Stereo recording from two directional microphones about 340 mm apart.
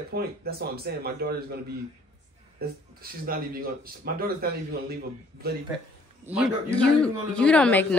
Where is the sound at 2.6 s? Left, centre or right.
Right.